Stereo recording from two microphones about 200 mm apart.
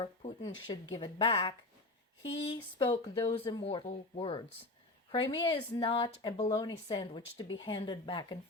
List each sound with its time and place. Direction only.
0.0 s speech: 25° left (ahead or behind)
2.7 s speech: 25° left (ahead or behind)